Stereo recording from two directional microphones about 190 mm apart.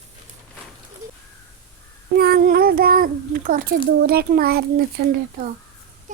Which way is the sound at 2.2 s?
55° right (ahead or behind).